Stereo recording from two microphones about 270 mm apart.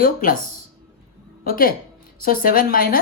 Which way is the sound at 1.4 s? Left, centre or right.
Left.